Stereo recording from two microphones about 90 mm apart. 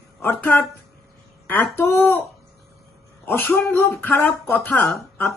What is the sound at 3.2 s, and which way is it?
Speech, 25° left (ahead or behind).